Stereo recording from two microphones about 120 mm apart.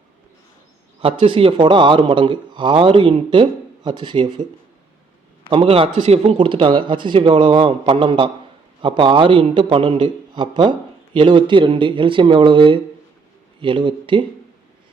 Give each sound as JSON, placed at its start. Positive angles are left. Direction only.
{"t": 1.0, "sound": "a man's voice", "side_deg": -55}
{"t": 5.5, "sound": "a man's voice", "side_deg": -55}